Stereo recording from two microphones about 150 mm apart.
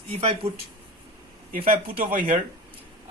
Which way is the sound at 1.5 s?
70° right (ahead or behind).